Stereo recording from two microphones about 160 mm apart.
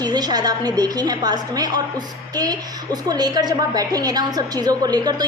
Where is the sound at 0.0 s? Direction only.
25° right (ahead or behind).